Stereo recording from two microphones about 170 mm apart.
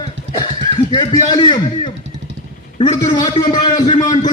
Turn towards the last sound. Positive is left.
turn(degrees=25)  # may be behind; listen again after turning